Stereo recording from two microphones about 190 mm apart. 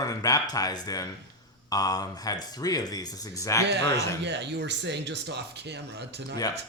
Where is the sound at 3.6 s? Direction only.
65° right (ahead or behind).